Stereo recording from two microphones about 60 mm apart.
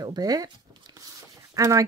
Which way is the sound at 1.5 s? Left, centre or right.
Right.